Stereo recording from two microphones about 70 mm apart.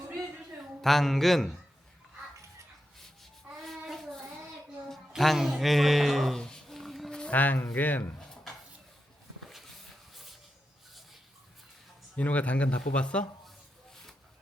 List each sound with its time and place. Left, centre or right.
0.8 s speech: centre
3.5 s child singing: centre
4.9 s a sound: centre
7.3 s speech: left
8.2 s drawer open or close: centre
12.1 s speech: left
13.9 s a sound: centre